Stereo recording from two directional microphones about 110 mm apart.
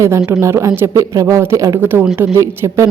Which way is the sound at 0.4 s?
25° right (ahead or behind).